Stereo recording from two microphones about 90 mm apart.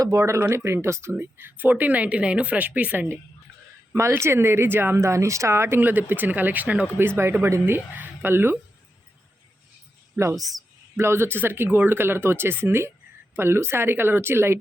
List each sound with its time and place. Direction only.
0.0 s speech: 35° right (ahead or behind); by 3.2 s 20° right (ahead or behind)
3.9 s speech: 30° right (ahead or behind)
10.2 s speech: 30° right (ahead or behind)